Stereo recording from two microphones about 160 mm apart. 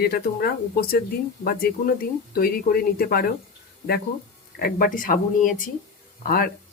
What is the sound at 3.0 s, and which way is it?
Speech, 70° left (ahead or behind).